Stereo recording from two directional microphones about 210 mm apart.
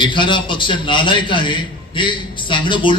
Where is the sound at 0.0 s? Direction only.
20° left (ahead or behind).